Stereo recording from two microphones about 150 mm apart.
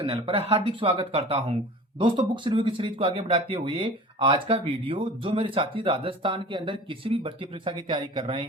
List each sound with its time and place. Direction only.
0.0 s speech: 40° right (ahead or behind)